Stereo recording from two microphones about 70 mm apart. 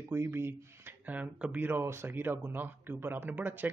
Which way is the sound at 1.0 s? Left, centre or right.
Right.